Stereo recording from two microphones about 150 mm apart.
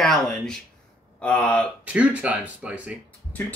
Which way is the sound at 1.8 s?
10° right (ahead or behind).